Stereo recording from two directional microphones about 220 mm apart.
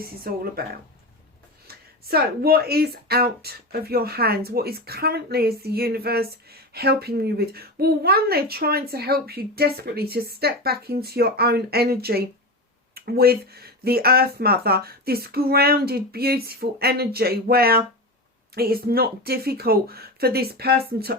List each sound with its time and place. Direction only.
1.6 s speech: 45° right (ahead or behind)